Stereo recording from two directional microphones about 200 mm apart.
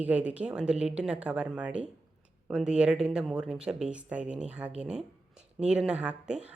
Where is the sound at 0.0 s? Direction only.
5° right (ahead or behind).